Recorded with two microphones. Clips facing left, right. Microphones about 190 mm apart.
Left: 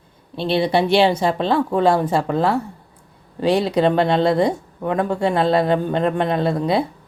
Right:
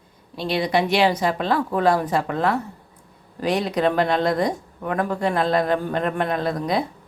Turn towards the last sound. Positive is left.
turn(degrees=30)  # may be behind; listen again after turning